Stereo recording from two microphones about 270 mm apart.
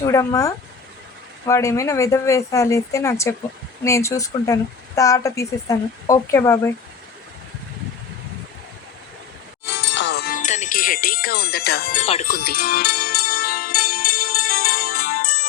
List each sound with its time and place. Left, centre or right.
0.0 s speech: centre
9.6 s music: left
11.9 s music: left